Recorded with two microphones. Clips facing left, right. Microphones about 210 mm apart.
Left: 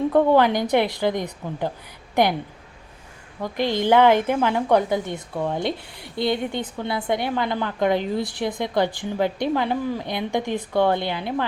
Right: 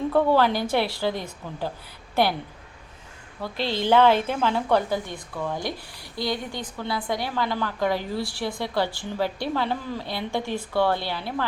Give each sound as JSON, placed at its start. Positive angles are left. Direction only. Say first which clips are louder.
{"t": 0.1, "sound": "a woman's voice", "louder": "left 2 dB", "side_deg": 15}
{"t": 3.4, "sound": "a woman's voice", "louder": "left 4 dB", "side_deg": 15}